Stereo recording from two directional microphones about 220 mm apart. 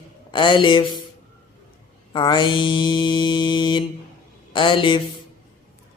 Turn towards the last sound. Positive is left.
turn(degrees=20)  # may be behind; listen again after turning